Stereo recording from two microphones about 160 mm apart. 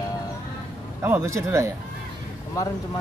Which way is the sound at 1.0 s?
15° right (ahead or behind).